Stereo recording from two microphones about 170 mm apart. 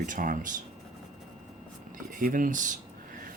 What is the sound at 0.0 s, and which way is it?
Speech, 50° right (ahead or behind).